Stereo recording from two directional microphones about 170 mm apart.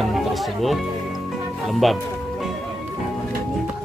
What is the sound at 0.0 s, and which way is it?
Speech, centre (ahead or behind).